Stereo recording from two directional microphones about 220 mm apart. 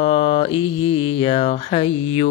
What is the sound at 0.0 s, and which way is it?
Mantra, 25° left (ahead or behind).